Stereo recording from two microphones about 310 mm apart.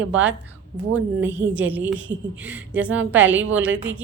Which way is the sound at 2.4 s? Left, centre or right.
Centre.